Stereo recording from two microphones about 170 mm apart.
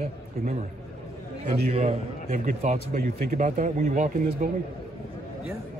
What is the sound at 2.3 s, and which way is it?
Speech, 55° right (ahead or behind).